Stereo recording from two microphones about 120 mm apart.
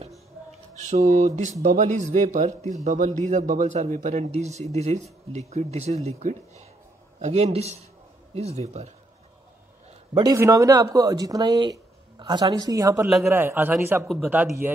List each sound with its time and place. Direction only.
0.7 s a man's voice: 90° right; by 8.9 s 70° right (ahead or behind)
10.2 s speech: 25° right (ahead or behind)
13.0 s a man's voice: centre (ahead or behind)
13.3 s a man's voice: 20° right (ahead or behind)
14.0 s a man's voice: centre (ahead or behind)
14.3 s a man's voice: 15° right (ahead or behind)